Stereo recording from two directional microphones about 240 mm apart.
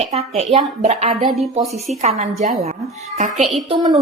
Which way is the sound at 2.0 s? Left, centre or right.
Right.